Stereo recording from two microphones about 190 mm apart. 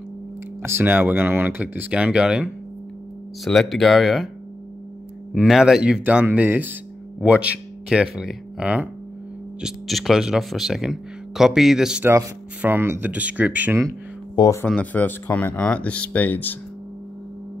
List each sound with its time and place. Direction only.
0.6 s speech: 15° right (ahead or behind)
5.3 s speech: 5° right (ahead or behind)
14.3 s speech: 20° left (ahead or behind)
14.7 s speech: 10° left (ahead or behind)